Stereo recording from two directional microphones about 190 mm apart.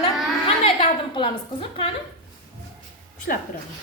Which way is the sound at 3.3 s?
60° left (ahead or behind).